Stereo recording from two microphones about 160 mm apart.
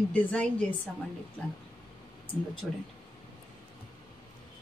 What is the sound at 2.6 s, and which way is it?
Speech, 5° left (ahead or behind).